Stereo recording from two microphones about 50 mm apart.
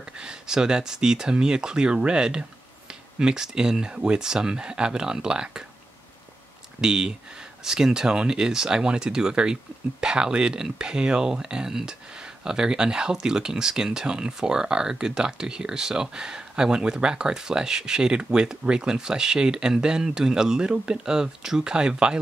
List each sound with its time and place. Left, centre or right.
0.2 s speech: centre
6.8 s speech: centre